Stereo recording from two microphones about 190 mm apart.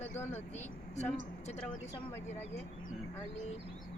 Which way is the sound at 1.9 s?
15° left (ahead or behind).